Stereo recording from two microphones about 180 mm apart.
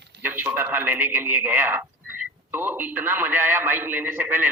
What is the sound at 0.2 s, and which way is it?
A man's voice, 10° right (ahead or behind).